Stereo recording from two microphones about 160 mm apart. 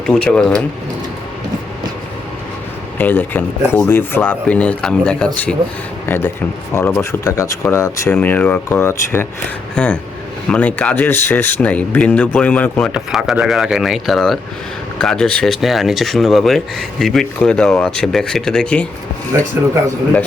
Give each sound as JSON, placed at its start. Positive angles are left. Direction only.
{"t": 0.3, "sound": "speech", "side_deg": 5}
{"t": 3.0, "sound": "speech", "side_deg": 10}
{"t": 8.1, "sound": "speech", "side_deg": 10}
{"t": 12.9, "sound": "speech", "side_deg": 0}